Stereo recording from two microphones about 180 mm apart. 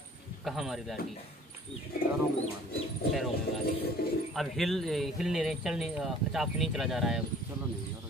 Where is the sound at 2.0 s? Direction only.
55° left (ahead or behind).